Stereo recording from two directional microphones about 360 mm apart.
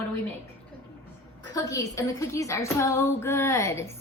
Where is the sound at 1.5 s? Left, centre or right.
Centre.